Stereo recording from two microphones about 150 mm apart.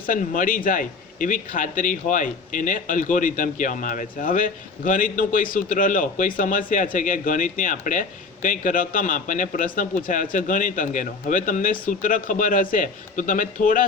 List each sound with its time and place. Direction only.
0.0 s speech: 65° left (ahead or behind)